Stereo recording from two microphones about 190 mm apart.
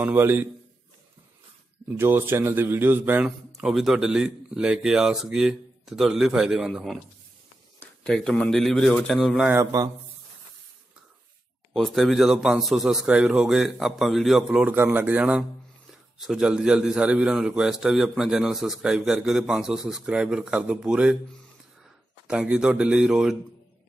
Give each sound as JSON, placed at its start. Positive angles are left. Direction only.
{"t": 0.0, "sound": "a man's voice", "side_deg": -10}
{"t": 2.0, "sound": "a man's voice", "side_deg": -10}
{"t": 9.5, "sound": "a man's voice", "side_deg": -15}
{"t": 11.7, "sound": "a man's voice", "side_deg": 0}
{"t": 22.3, "sound": "a man's voice", "side_deg": -5}